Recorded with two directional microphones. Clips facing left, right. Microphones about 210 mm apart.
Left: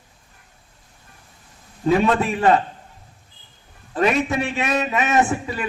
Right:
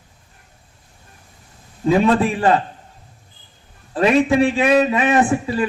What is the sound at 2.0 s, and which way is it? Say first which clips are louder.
Speech: right 3 dB; 30° right (ahead or behind).